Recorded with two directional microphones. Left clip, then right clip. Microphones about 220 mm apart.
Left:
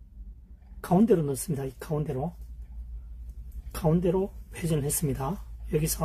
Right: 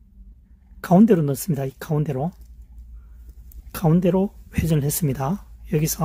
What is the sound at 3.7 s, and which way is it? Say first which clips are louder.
Speech: right 5 dB; 45° right (ahead or behind).